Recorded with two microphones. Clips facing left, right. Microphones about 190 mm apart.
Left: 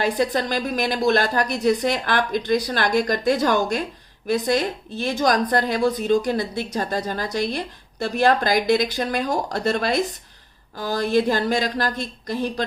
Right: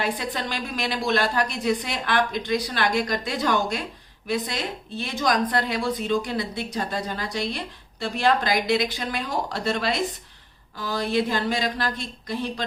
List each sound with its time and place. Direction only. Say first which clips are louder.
0.0 s a woman's voice: left 6 dB; 40° left (ahead or behind)